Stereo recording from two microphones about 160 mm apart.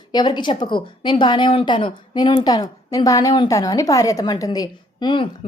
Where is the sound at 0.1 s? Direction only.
25° left (ahead or behind).